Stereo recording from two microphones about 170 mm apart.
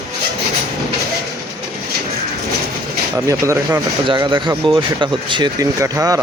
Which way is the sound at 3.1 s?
15° right (ahead or behind).